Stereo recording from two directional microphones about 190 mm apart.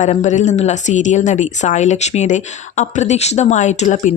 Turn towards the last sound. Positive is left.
turn(degrees=40)  # may be behind; listen again after turning